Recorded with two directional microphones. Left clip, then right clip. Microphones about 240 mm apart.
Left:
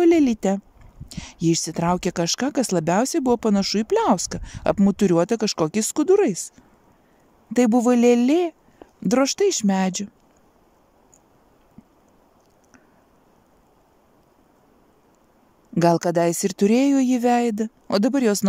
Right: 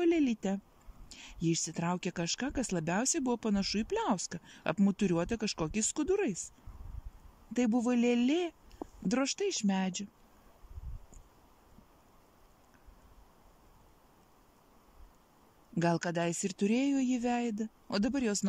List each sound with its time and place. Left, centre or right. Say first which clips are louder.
0.0 s speech: left 13 dB; left
7.5 s speech: left 13 dB; left
15.7 s speech: left 14 dB; left